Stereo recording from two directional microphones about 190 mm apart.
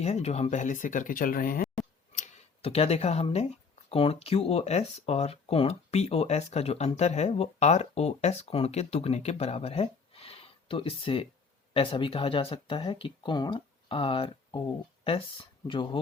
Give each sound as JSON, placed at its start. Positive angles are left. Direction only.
{"t": 0.0, "sound": "speech", "side_deg": 35}
{"t": 2.1, "sound": "tick", "side_deg": 35}
{"t": 3.8, "sound": "speech", "side_deg": 30}